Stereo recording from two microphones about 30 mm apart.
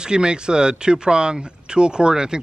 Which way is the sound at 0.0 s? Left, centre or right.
Right.